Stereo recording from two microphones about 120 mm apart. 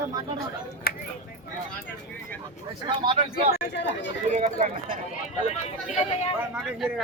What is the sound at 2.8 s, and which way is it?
Speech, 45° right (ahead or behind).